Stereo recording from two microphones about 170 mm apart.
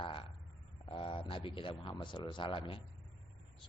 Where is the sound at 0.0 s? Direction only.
30° left (ahead or behind).